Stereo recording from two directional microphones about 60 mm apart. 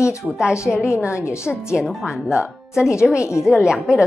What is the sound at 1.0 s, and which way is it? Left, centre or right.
Speech, left.